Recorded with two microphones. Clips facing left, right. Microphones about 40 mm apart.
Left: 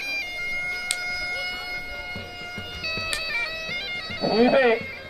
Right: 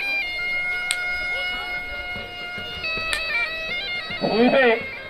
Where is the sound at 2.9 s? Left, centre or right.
Right.